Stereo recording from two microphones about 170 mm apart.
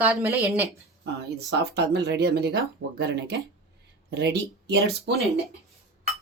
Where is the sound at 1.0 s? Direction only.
75° right (ahead or behind).